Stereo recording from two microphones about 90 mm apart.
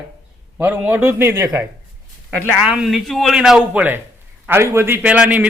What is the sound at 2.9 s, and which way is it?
Speech, centre (ahead or behind).